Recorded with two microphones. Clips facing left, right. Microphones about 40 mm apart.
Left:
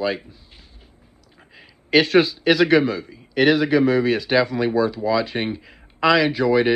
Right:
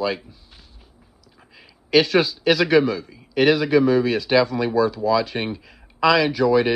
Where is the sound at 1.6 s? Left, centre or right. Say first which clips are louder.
Even; left.